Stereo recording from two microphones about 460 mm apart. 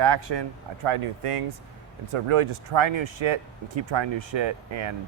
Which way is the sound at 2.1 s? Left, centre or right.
Right.